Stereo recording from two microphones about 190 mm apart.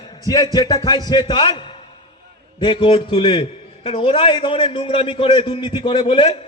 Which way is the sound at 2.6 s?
25° left (ahead or behind).